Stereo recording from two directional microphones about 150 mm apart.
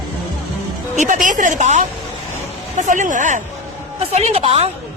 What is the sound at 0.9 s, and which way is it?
A woman's voice, 55° right (ahead or behind).